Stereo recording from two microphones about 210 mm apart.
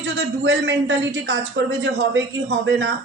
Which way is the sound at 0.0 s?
55° right (ahead or behind).